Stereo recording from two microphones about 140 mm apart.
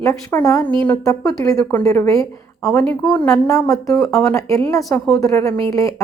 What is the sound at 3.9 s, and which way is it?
Speech, 20° left (ahead or behind).